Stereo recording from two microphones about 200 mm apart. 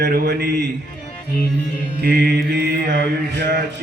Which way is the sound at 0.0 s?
55° right (ahead or behind).